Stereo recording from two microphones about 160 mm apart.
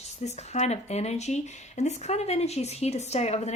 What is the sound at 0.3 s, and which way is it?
Speech, 45° left (ahead or behind).